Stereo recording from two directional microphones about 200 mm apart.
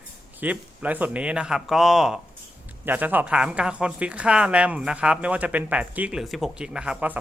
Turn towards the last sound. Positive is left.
turn(degrees=-5)  # may be behind; listen again after turning